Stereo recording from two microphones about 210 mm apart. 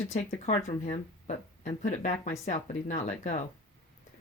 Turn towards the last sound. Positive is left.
turn(degrees=35)  # may be behind; listen again after turning